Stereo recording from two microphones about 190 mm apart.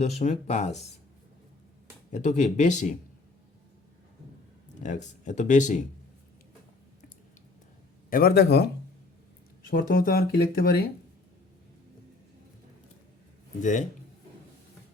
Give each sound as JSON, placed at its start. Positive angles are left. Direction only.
{"t": 0.0, "sound": "speech", "side_deg": 35}
{"t": 2.1, "sound": "speech", "side_deg": 40}
{"t": 4.8, "sound": "speech", "side_deg": 40}
{"t": 8.1, "sound": "speech", "side_deg": 55}
{"t": 13.6, "sound": "speech", "side_deg": 40}